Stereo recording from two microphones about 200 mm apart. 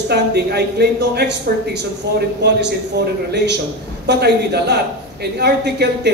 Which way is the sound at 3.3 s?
55° right (ahead or behind).